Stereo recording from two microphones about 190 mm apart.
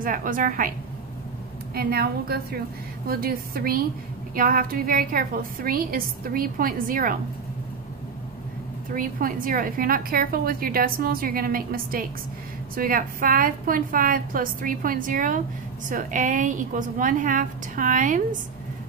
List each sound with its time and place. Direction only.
0.0 s a woman's voice: 45° right (ahead or behind)
8.9 s a woman's voice: 45° right (ahead or behind)